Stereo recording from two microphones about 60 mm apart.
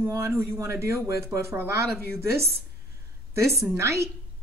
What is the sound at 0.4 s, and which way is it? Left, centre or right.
A woman's voice, right.